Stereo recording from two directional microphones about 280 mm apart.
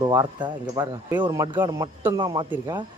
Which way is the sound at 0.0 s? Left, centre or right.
Centre.